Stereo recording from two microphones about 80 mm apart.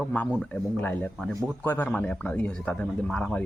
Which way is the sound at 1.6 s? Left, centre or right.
Left.